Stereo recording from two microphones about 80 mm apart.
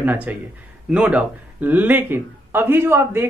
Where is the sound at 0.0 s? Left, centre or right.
Right.